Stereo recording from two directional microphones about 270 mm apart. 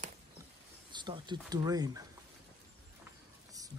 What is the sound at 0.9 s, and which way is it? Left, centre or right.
Speech, centre.